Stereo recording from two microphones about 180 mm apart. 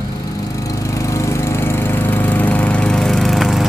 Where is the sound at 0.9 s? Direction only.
15° left (ahead or behind).